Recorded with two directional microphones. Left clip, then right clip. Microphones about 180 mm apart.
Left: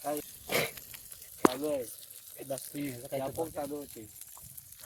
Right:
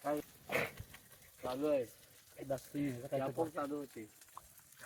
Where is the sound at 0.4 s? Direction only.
90° left.